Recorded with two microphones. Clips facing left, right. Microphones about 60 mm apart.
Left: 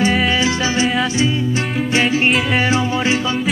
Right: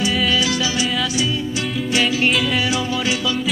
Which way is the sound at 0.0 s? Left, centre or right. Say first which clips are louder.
Left 3 dB; left.